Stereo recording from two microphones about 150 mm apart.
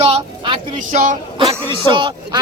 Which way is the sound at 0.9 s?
60° right (ahead or behind).